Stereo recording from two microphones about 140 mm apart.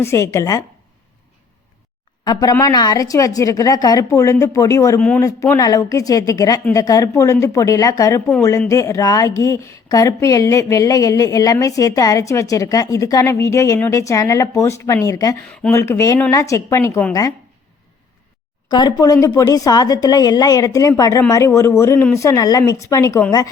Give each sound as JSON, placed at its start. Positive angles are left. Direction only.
{"t": 0.0, "sound": "speech", "side_deg": 20}
{"t": 2.2, "sound": "speech", "side_deg": 30}
{"t": 4.9, "sound": "a man's voice", "side_deg": 10}
{"t": 5.2, "sound": "speech", "side_deg": 25}
{"t": 18.7, "sound": "speech", "side_deg": 30}